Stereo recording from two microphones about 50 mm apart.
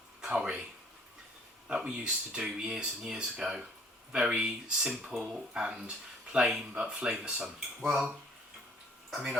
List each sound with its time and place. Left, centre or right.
0.2 s a sound: centre
1.6 s speech: centre
7.8 s speech: centre